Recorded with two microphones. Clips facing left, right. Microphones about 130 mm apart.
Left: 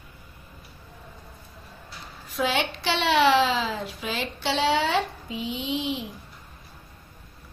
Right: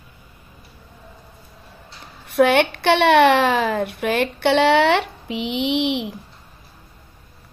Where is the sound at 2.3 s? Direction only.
65° right (ahead or behind).